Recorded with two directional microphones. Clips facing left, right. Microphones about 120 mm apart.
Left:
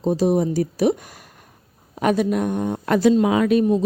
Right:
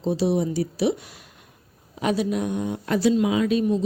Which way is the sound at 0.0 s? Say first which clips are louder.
Left 4 dB; 45° left (ahead or behind).